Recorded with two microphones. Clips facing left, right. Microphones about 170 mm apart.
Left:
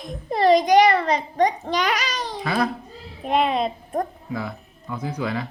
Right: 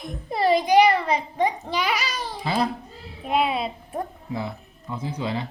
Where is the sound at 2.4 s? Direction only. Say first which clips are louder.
Left 1 dB; 25° right (ahead or behind).